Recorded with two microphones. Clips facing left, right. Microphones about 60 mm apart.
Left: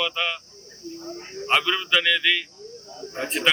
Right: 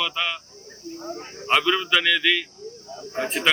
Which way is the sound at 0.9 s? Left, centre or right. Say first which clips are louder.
Right 1 dB; right.